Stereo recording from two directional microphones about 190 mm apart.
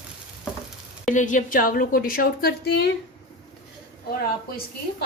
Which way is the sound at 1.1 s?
40° left (ahead or behind).